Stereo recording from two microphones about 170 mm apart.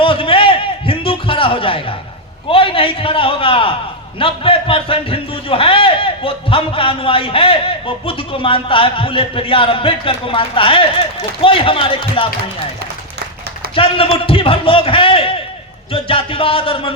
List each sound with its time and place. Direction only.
0.0 s a sound: 30° left (ahead or behind)
2.5 s a man's voice: 30° left (ahead or behind)
13.7 s a man's voice: 30° left (ahead or behind)